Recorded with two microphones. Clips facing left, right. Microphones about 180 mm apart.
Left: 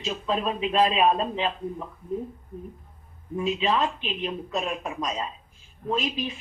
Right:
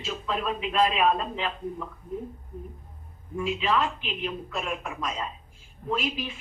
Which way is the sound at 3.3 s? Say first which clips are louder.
Left 2 dB; 25° left (ahead or behind).